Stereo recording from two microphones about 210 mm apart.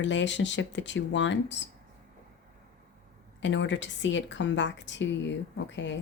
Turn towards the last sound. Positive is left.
turn(degrees=60)  # may be behind; listen again after turning